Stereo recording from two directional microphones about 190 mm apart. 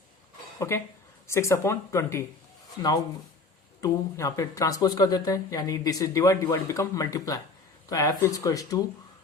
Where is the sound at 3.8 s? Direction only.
15° left (ahead or behind).